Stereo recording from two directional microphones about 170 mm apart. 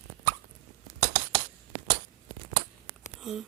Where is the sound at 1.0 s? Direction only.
50° right (ahead or behind).